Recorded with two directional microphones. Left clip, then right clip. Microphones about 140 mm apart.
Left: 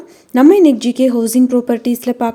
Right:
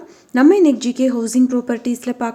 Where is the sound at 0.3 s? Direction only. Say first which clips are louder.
Left 4 dB; 25° left (ahead or behind).